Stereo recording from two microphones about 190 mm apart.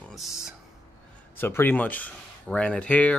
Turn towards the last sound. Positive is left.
turn(degrees=5)  # may be behind; listen again after turning